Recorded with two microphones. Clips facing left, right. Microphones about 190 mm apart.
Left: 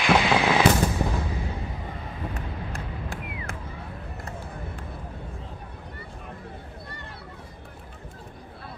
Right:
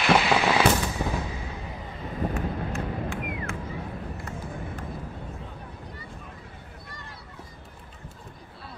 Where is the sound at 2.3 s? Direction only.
40° left (ahead or behind).